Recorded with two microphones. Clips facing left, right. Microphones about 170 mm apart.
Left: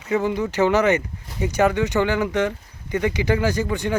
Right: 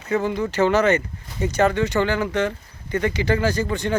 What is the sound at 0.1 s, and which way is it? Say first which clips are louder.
Speech: left 1 dB; 15° left (ahead or behind).